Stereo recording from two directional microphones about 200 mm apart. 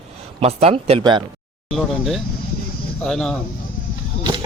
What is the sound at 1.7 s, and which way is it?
Speech, centre (ahead or behind).